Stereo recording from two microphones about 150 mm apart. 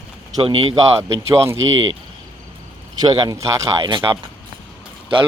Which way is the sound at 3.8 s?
35° right (ahead or behind).